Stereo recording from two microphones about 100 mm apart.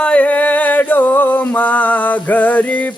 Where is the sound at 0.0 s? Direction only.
10° left (ahead or behind).